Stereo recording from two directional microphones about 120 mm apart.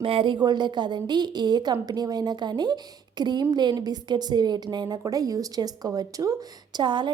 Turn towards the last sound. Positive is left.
turn(degrees=-40)  # may be behind; listen again after turning